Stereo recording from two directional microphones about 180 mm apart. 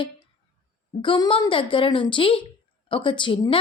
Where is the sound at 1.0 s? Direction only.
30° left (ahead or behind).